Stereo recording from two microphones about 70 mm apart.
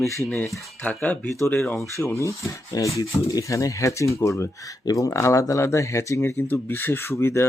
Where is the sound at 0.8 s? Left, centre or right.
Left.